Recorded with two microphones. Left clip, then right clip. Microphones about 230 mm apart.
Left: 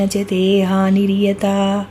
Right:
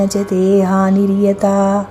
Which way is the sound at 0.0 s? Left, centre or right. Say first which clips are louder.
Right 3 dB; centre.